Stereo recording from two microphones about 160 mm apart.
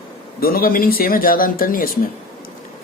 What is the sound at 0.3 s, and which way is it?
Speech, 65° left (ahead or behind).